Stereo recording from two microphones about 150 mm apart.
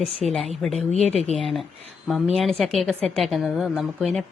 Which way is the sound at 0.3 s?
Centre (ahead or behind).